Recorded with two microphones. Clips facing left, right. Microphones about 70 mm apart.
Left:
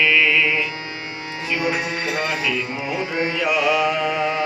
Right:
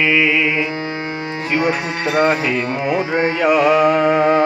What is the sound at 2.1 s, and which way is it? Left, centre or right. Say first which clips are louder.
Music: right 10 dB; right.